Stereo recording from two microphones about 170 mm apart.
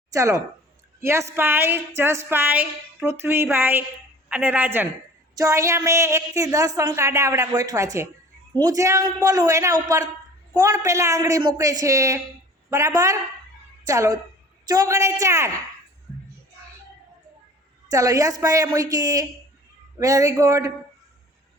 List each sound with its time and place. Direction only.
0.1 s a woman's voice: 20° right (ahead or behind)
17.8 s a woman's voice: 20° right (ahead or behind)